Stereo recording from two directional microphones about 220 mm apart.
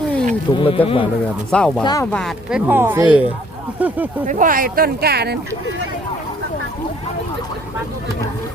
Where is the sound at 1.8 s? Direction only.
15° left (ahead or behind).